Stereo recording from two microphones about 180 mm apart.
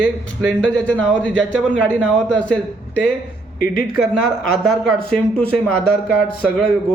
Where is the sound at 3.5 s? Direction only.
55° left (ahead or behind).